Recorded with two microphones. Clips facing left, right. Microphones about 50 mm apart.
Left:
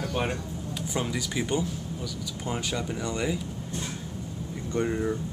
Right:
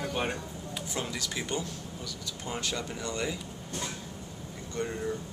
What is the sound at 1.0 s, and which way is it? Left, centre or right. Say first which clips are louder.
Speech: left 5 dB; centre.